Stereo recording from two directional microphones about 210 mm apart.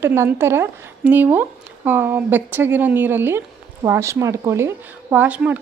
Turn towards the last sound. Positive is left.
turn(degrees=-5)  # may be behind; listen again after turning